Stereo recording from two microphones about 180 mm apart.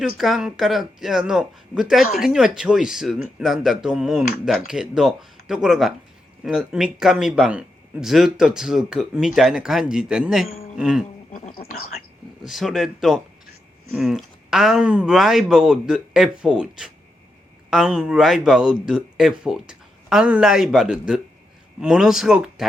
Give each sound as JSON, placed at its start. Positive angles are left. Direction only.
{"t": 0.0, "sound": "speech", "side_deg": 0}
{"t": 11.3, "sound": "a sound", "side_deg": 40}
{"t": 12.4, "sound": "speech", "side_deg": 0}